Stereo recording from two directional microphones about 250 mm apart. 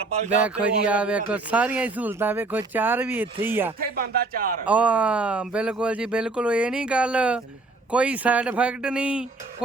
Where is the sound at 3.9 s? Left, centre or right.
Right.